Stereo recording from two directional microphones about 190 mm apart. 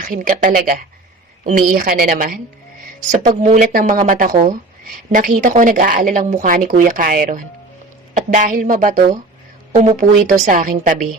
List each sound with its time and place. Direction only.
0.0 s a woman's voice: 45° right (ahead or behind)